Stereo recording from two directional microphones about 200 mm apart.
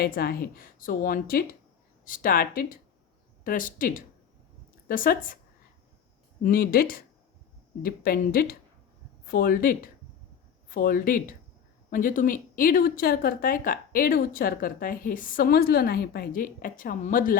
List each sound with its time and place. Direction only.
0.0 s speech: 50° left (ahead or behind)
6.4 s speech: 45° left (ahead or behind)